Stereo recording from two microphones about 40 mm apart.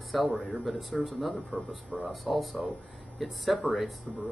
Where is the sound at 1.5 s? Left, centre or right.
Right.